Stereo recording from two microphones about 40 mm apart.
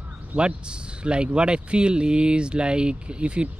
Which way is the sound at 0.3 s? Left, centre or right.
Right.